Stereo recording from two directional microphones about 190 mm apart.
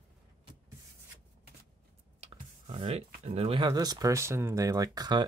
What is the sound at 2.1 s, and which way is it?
Speech, 35° right (ahead or behind).